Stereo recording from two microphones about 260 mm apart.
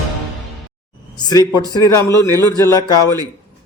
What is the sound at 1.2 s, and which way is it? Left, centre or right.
Speech, centre.